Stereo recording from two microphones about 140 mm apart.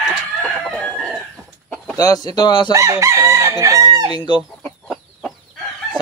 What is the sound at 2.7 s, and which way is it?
Chicken, 20° right (ahead or behind).